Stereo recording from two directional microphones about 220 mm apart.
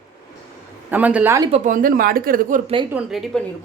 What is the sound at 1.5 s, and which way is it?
Speech, 30° right (ahead or behind).